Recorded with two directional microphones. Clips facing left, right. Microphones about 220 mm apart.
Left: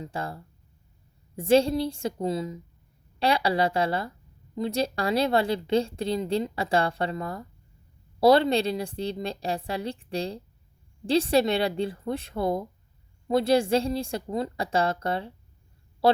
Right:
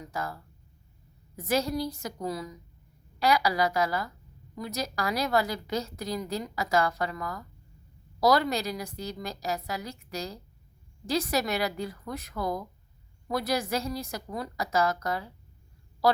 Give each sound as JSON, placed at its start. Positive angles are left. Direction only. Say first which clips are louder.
{"t": 0.0, "sound": "a woman's voice", "louder": "left 2 dB", "side_deg": 30}